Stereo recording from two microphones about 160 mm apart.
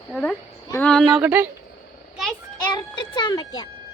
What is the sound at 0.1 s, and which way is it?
Speech, 5° left (ahead or behind).